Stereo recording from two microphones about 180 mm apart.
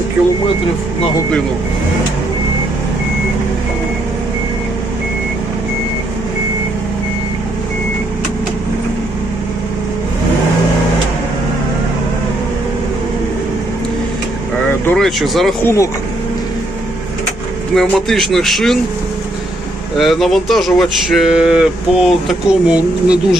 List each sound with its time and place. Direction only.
14.8 s speech: centre (ahead or behind)
15.6 s speech: 15° left (ahead or behind)
17.7 s speech: centre (ahead or behind)
20.0 s speech: centre (ahead or behind)